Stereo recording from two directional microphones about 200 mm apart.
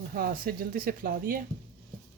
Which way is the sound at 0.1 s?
45° right (ahead or behind).